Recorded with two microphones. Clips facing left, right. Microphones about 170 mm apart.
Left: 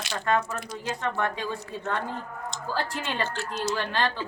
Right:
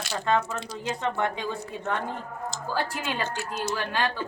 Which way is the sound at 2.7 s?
10° right (ahead or behind).